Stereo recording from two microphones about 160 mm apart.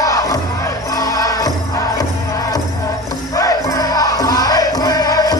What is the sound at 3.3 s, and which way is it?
Music, 20° left (ahead or behind).